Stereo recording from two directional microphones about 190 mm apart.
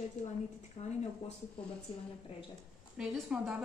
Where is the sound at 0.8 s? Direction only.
35° left (ahead or behind).